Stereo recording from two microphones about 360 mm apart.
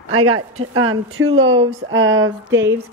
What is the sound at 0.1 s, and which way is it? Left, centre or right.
A woman's voice, right.